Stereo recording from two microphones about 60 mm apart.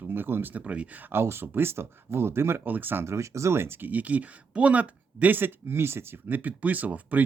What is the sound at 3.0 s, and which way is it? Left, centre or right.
Speech, right.